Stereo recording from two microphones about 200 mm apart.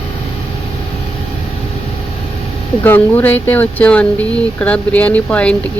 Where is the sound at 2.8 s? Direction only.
10° left (ahead or behind).